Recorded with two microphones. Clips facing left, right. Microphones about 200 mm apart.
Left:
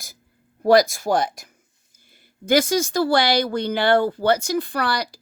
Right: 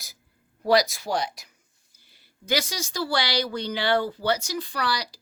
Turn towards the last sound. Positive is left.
turn(degrees=55)  # may be behind; listen again after turning